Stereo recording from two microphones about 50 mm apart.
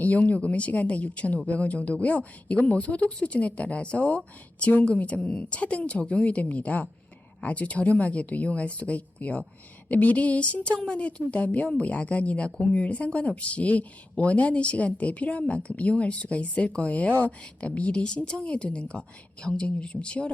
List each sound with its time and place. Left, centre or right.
0.0 s speech: left
4.6 s a woman's voice: left